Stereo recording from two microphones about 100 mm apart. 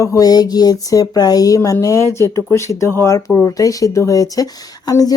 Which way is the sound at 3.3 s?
30° left (ahead or behind).